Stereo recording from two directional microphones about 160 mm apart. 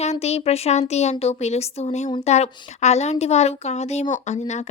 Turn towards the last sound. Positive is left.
turn(degrees=45)  # may be behind; listen again after turning